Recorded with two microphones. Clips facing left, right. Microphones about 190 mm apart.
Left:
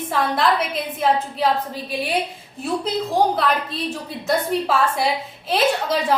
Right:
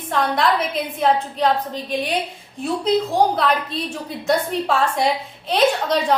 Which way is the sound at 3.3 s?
Centre (ahead or behind).